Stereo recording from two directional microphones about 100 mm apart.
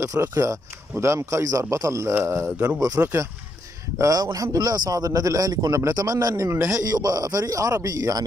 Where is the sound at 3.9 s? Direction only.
30° right (ahead or behind).